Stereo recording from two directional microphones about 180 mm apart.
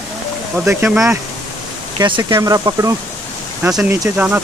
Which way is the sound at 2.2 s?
20° right (ahead or behind).